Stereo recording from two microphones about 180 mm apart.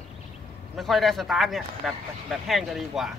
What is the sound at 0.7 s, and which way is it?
Speech, centre (ahead or behind).